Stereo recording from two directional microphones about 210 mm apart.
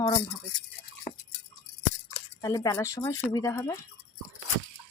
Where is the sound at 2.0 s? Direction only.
15° left (ahead or behind).